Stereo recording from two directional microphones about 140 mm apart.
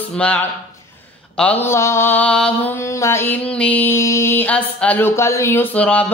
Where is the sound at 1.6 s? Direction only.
20° left (ahead or behind).